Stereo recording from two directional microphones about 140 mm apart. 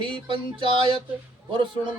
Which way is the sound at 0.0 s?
35° right (ahead or behind).